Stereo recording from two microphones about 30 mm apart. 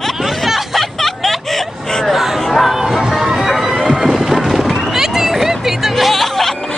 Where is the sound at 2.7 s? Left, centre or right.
Centre.